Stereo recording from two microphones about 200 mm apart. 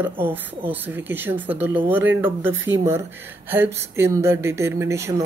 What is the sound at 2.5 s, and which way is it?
Speech, 70° right (ahead or behind).